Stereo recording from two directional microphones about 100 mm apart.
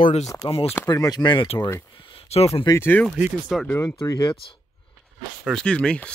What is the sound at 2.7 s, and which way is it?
Speech, 20° left (ahead or behind).